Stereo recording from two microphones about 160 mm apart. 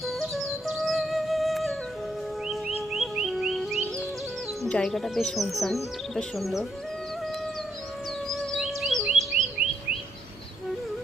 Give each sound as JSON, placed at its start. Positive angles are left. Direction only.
{"t": 0.0, "sound": "music", "side_deg": 0}
{"t": 2.5, "sound": "bird", "side_deg": 0}
{"t": 4.6, "sound": "speech", "side_deg": 0}
{"t": 8.3, "sound": "music", "side_deg": 0}